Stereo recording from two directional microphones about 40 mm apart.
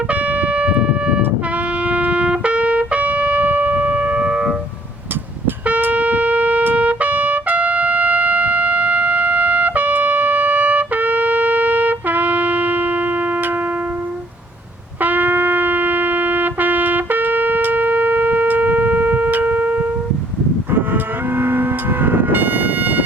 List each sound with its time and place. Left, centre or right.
0.1 s music: right
5.8 s a sound: right
6.7 s trumpet: right
15.0 s music: right
20.7 s livestock: right